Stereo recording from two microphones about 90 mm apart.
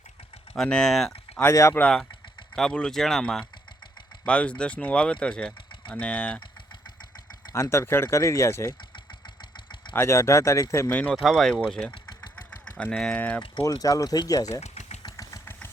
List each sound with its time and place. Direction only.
0.5 s speech: 5° left (ahead or behind)
1.5 s speech: 30° left (ahead or behind)
1.8 s speech: 5° left (ahead or behind)
7.5 s speech: 30° left (ahead or behind)
9.9 s speech: 30° left (ahead or behind)
10.8 s speech: 20° left (ahead or behind)
11.1 s speech: centre (ahead or behind); by 13.4 s 15° left (ahead or behind)
13.7 s speech: 40° left (ahead or behind)
15.1 s vehicle: 35° left (ahead or behind)